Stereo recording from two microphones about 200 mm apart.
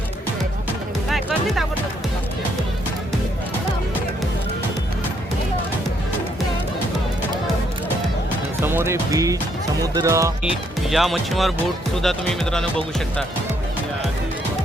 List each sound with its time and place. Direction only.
8.6 s speech: 10° right (ahead or behind)
10.8 s speech: centre (ahead or behind)